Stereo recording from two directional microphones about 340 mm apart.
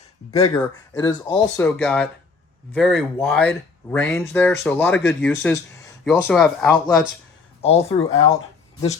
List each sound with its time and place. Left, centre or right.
0.3 s speech: centre
7.6 s speech: centre